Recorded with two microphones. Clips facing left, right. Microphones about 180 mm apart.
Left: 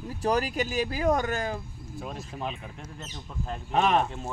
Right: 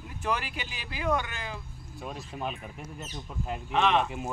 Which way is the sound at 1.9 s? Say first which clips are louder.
Left 1 dB; centre (ahead or behind).